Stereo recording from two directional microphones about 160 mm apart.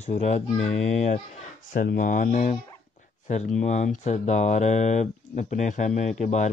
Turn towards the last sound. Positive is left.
turn(degrees=50)  # may be behind; listen again after turning